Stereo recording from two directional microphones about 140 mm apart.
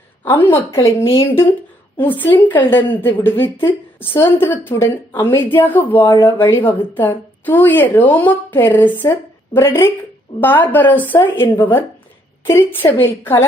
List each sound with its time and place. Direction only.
0.3 s speech: 15° left (ahead or behind)
2.0 s speech: 15° left (ahead or behind)